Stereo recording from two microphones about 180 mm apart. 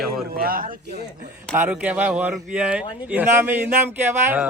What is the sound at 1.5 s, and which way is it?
Speech, 10° right (ahead or behind).